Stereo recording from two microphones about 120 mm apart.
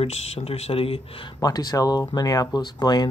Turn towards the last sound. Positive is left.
turn(degrees=35)  # may be behind; listen again after turning